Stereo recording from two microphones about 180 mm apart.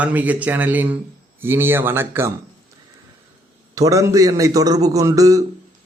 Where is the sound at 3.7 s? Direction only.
20° right (ahead or behind).